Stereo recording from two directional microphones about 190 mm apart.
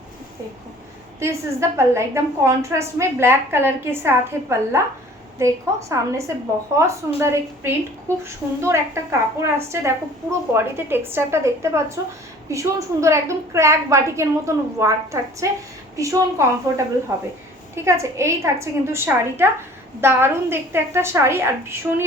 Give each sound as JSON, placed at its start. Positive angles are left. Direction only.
{"t": 1.2, "sound": "a woman's voice", "side_deg": -15}